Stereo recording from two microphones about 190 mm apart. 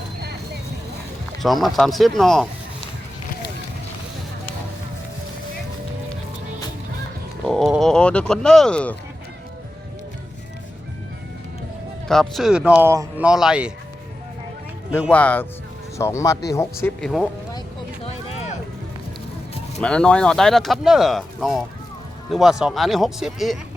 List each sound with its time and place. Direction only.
1.4 s speech: centre (ahead or behind)
7.4 s a sound: centre (ahead or behind)
12.0 s speech: centre (ahead or behind)
15.1 s speech: 10° left (ahead or behind)
17.0 s speech: centre (ahead or behind)
18.0 s a sound: 30° left (ahead or behind)
19.8 s speech: 5° left (ahead or behind)